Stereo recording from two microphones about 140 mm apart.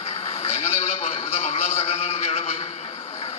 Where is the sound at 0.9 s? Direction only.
40° left (ahead or behind).